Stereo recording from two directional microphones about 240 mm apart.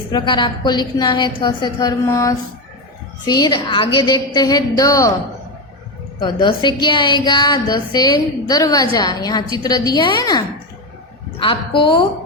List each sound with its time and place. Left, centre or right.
0.1 s a woman's voice: centre
6.1 s a woman's voice: centre